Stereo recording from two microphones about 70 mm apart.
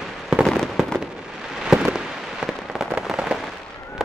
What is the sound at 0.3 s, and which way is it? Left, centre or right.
Fireworks, centre.